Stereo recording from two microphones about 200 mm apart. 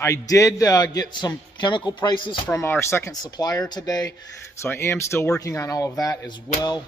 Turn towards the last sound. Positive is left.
turn(degrees=15)  # may be behind; listen again after turning